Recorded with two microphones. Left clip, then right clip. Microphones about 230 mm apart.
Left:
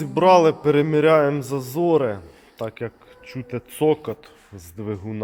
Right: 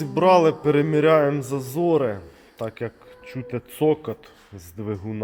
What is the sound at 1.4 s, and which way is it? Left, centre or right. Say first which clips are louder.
Speech: left 1 dB; centre.